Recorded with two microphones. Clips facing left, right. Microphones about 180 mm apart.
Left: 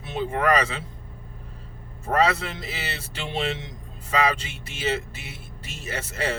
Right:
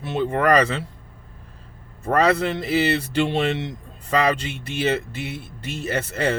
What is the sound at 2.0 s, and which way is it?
Speech, 60° right (ahead or behind).